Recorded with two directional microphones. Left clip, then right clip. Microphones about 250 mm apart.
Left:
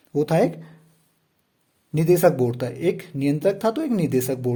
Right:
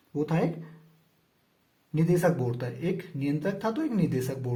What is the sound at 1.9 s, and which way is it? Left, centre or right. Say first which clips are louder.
Speech: left 8 dB; left.